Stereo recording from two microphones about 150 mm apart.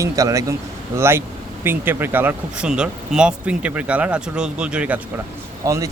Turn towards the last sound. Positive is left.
turn(degrees=-20)  # may be behind; listen again after turning